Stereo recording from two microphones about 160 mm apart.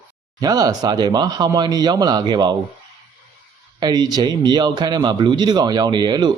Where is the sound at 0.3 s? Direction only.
25° right (ahead or behind).